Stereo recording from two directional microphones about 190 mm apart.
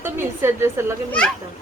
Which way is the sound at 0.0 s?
15° right (ahead or behind).